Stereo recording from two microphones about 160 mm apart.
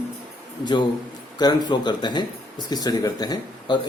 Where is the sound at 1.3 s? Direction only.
25° left (ahead or behind).